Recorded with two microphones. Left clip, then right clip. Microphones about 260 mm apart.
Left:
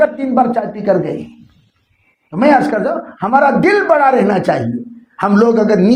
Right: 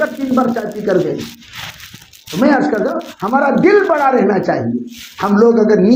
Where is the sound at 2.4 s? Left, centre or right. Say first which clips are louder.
Left 2 dB; left.